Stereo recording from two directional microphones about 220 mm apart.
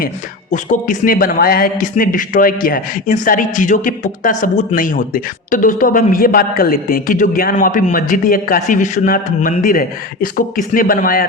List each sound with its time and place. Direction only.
0.5 s a man's voice: 35° left (ahead or behind)